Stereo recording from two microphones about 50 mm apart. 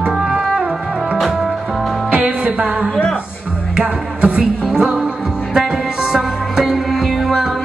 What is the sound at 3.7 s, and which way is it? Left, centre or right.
Music, right.